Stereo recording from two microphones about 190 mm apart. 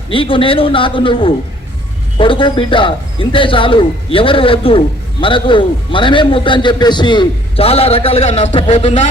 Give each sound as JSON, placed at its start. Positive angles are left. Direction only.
{"t": 0.1, "sound": "a man's voice", "side_deg": 25}